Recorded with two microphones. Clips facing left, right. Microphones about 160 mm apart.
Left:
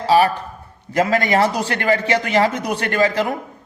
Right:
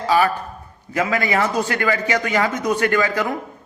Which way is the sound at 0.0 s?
30° left (ahead or behind).